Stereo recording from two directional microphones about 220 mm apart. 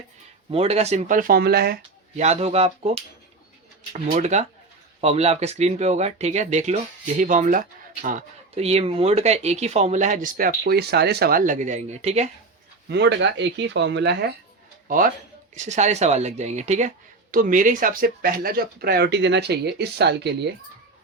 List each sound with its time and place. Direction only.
0.5 s speech: 30° right (ahead or behind); by 2.2 s 45° right (ahead or behind)
2.2 s speech: 30° right (ahead or behind)
4.1 s speech: 30° right (ahead or behind)
12.9 s speech: 50° right (ahead or behind)
14.8 s speech: 40° right (ahead or behind)